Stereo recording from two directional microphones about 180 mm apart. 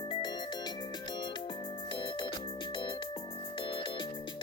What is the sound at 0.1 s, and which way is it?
Music, 25° left (ahead or behind).